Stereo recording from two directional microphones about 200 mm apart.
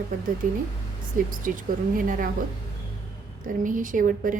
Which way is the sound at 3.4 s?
40° right (ahead or behind).